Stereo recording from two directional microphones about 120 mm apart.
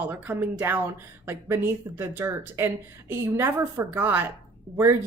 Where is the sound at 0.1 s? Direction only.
15° right (ahead or behind).